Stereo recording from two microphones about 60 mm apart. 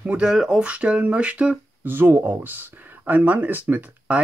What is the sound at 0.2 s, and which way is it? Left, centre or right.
Speech, centre.